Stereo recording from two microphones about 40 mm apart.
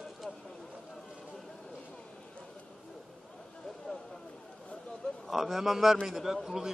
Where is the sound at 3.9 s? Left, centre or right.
Centre.